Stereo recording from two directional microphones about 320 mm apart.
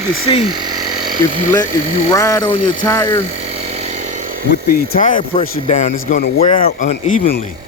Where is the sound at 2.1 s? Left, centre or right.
Centre.